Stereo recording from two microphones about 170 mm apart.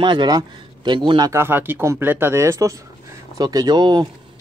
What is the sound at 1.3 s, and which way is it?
Speech, 15° right (ahead or behind).